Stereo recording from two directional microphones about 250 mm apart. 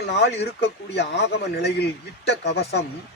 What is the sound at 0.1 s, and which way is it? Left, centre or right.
A man's voice, left.